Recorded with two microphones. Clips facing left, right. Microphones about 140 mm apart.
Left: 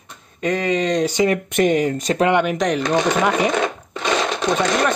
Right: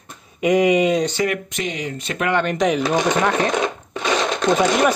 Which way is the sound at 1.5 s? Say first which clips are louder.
Left 10 dB; 50° left (ahead or behind).